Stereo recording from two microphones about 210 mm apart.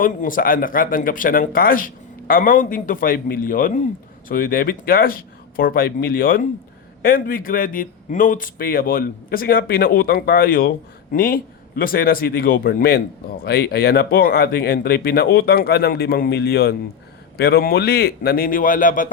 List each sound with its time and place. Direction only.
0.0 s speech: 40° left (ahead or behind)